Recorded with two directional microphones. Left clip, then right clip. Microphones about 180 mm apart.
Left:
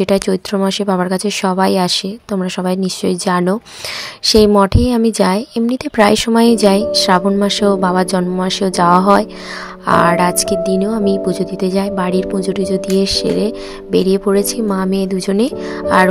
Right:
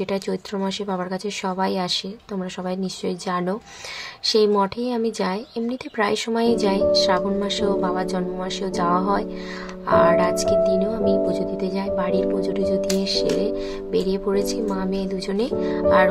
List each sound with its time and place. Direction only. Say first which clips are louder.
0.0 s speech: left 11 dB; 50° left (ahead or behind)